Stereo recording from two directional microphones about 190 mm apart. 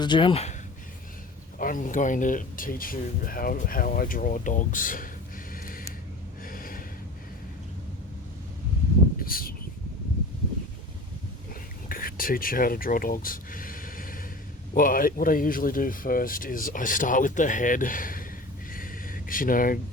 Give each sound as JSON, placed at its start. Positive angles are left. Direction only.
{"t": 0.0, "sound": "speech", "side_deg": 25}
{"t": 1.5, "sound": "speech", "side_deg": 45}
{"t": 6.4, "sound": "gasp", "side_deg": 50}
{"t": 9.1, "sound": "a sound", "side_deg": 50}
{"t": 11.9, "sound": "speech", "side_deg": 50}
{"t": 18.7, "sound": "a sound", "side_deg": 50}